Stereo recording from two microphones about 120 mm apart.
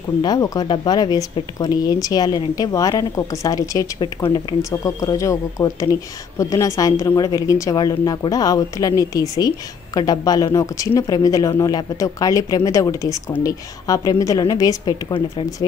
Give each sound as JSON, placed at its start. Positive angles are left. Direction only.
{"t": 0.2, "sound": "a woman's voice", "side_deg": 35}